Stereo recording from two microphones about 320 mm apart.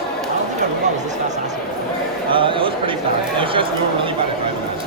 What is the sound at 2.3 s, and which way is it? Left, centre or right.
A man's voice, centre.